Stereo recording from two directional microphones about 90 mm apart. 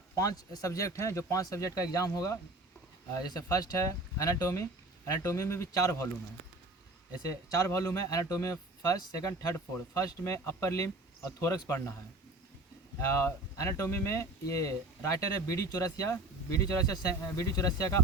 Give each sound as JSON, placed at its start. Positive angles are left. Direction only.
{"t": 0.2, "sound": "speech", "side_deg": 40}
{"t": 7.3, "sound": "speech", "side_deg": 35}
{"t": 13.0, "sound": "speech", "side_deg": 30}